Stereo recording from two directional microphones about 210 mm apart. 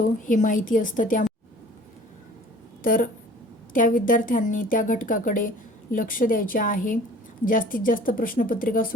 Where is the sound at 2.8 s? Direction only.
40° left (ahead or behind).